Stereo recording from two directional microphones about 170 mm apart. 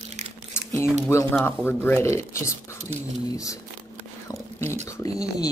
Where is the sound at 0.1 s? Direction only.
45° right (ahead or behind).